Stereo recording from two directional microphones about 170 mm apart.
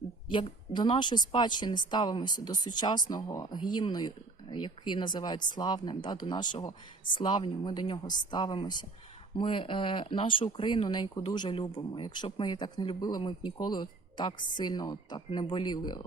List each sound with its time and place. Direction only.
0.3 s a woman's voice: 30° left (ahead or behind)